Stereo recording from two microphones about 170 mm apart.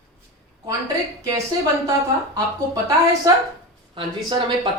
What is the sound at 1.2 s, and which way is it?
Speech, 20° right (ahead or behind).